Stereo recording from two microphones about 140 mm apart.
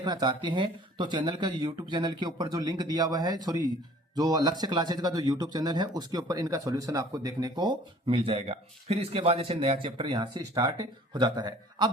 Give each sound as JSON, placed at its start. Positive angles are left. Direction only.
{"t": 0.0, "sound": "speech", "side_deg": -30}